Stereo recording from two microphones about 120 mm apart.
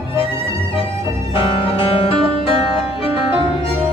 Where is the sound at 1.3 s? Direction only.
50° left (ahead or behind).